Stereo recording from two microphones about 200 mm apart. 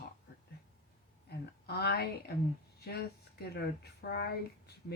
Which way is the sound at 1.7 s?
55° left (ahead or behind).